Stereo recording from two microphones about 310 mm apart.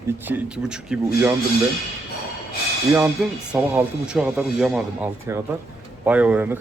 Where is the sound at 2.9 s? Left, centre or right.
Centre.